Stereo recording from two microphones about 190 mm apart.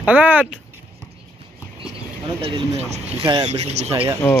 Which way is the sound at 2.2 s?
30° right (ahead or behind).